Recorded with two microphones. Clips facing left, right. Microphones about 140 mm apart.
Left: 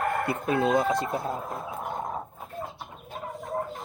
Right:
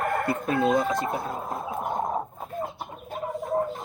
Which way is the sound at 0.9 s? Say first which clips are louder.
Even; 25° right (ahead or behind).